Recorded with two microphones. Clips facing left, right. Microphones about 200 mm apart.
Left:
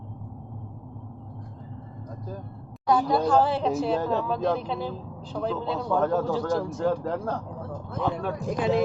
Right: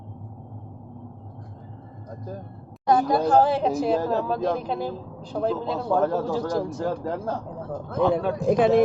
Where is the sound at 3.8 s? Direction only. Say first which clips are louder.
Right 2 dB; 5° right (ahead or behind).